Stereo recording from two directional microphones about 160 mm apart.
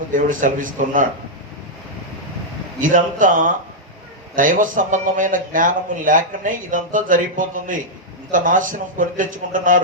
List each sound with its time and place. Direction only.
0.1 s a man's voice: 55° right (ahead or behind)
2.8 s a man's voice: 55° right (ahead or behind)